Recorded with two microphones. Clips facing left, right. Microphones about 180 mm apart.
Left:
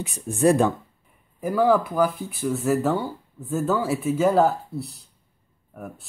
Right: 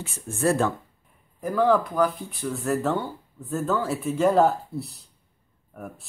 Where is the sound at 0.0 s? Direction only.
15° left (ahead or behind).